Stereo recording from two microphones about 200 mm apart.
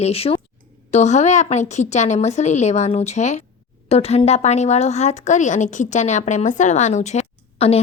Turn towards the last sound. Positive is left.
turn(degrees=30)  # may be behind; listen again after turning